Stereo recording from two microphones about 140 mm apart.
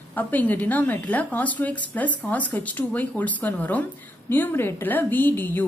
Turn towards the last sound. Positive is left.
turn(degrees=15)  # may be behind; listen again after turning